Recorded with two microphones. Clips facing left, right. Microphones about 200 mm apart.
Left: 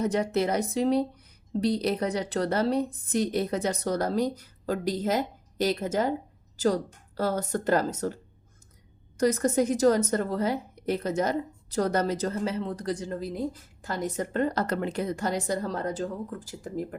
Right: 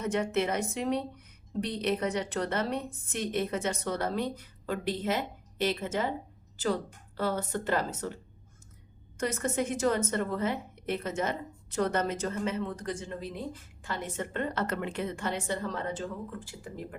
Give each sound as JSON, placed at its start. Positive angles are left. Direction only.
{"t": 0.0, "sound": "a woman's voice", "side_deg": 35}
{"t": 7.2, "sound": "a woman's voice", "side_deg": 40}